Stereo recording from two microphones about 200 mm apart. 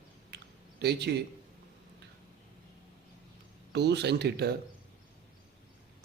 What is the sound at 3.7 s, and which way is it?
Speech, 55° right (ahead or behind).